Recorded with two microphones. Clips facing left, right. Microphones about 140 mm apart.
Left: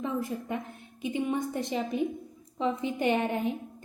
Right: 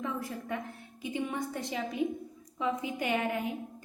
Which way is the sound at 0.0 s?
20° left (ahead or behind).